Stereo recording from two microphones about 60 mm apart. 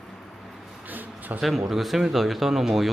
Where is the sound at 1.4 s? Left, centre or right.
Centre.